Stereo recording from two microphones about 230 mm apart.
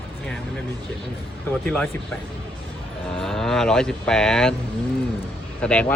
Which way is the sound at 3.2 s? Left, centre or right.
Centre.